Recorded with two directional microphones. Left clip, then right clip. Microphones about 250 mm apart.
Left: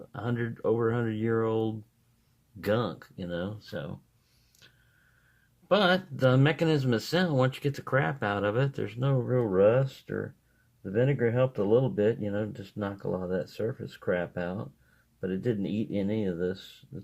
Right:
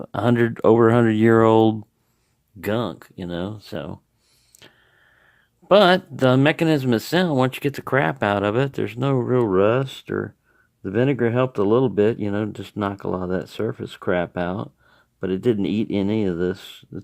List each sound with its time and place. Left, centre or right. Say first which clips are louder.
0.1 s speech: right 14 dB; right
4.6 s vehicle: right 9 dB; right
5.6 s speech: right 10 dB; right